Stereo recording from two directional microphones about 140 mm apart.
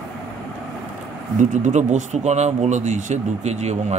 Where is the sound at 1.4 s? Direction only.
60° right (ahead or behind).